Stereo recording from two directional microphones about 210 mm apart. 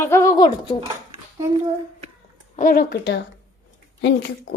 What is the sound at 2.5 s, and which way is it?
Speech, 40° left (ahead or behind).